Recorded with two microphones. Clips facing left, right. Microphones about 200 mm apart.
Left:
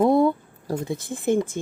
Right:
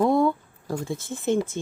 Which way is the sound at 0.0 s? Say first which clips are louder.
Left 2 dB; 20° left (ahead or behind).